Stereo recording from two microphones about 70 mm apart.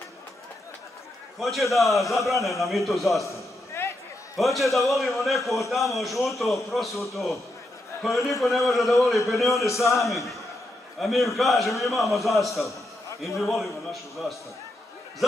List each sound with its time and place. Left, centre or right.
1.4 s a man's voice: centre
3.3 s a sound: left
4.4 s a man's voice: centre